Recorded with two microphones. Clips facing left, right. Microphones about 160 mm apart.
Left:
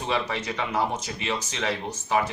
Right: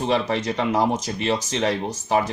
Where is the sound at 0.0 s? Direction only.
40° right (ahead or behind).